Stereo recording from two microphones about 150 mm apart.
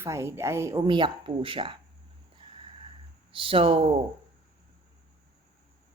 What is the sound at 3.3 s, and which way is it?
Speech, 35° right (ahead or behind).